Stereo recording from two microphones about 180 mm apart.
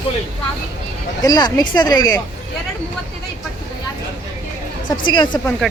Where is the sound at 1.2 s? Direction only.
20° left (ahead or behind).